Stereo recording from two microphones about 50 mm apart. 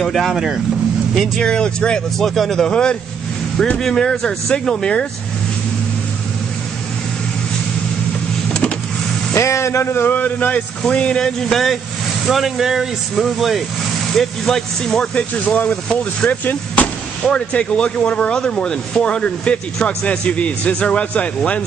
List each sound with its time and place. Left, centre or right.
0.0 s speech: centre
1.4 s speech: centre
2.1 s speech: centre
9.3 s speech: left
10.0 s a man's voice: left
10.9 s a man's voice: left
11.5 s speech: centre
15.1 s a man's voice: left
15.9 s speech: centre
16.3 s a man's voice: left